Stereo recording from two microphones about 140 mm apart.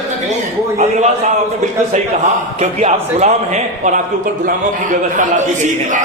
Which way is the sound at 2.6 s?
55° right (ahead or behind).